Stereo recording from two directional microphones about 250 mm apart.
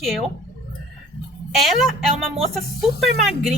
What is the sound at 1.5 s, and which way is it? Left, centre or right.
A woman's voice, centre.